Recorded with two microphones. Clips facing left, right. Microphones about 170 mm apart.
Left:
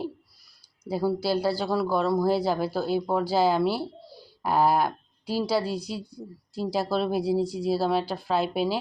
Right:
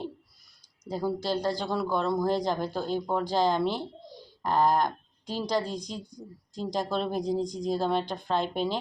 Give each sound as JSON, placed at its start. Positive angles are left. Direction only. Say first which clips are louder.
{"t": 0.9, "sound": "speech", "louder": "left 4 dB", "side_deg": 10}